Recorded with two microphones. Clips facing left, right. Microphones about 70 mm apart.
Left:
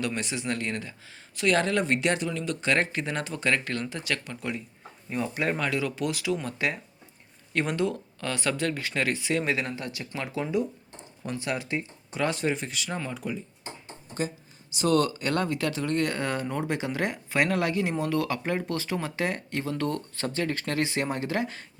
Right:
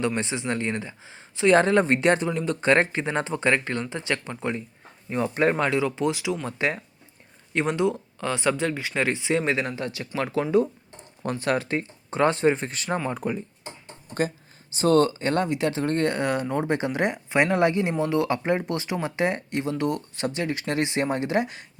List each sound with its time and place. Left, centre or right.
0.0 s speech: right
11.2 s speech: right
14.7 s speech: right
15.8 s speech: right
16.1 s speech: centre